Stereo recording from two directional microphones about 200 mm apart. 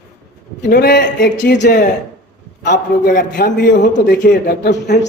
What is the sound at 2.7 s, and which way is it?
A man's voice, 45° left (ahead or behind).